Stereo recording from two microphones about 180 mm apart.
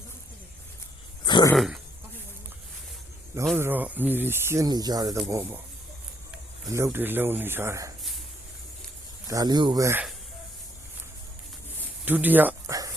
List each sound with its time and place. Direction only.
1.2 s throat clearing: 25° left (ahead or behind)
1.5 s throat clearing: centre (ahead or behind)
3.6 s speech: 10° right (ahead or behind)
6.7 s speech: 15° right (ahead or behind)
9.2 s speech: 20° right (ahead or behind)
12.0 s a sound: 10° right (ahead or behind)